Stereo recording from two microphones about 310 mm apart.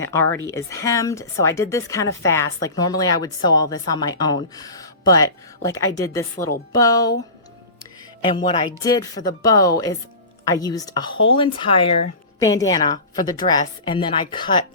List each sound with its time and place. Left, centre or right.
0.0 s speech: centre
8.2 s speech: centre